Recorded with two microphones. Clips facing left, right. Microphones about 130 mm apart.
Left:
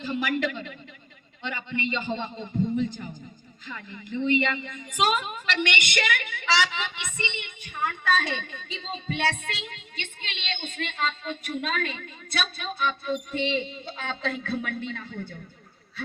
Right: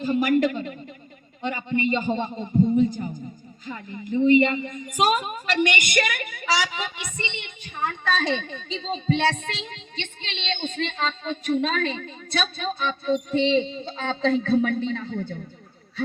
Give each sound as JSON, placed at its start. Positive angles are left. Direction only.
{"t": 0.0, "sound": "a man's voice", "side_deg": -45}
{"t": 7.3, "sound": "a woman's voice", "side_deg": -20}